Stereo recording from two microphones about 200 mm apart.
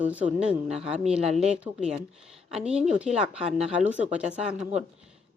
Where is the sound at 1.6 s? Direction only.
5° right (ahead or behind).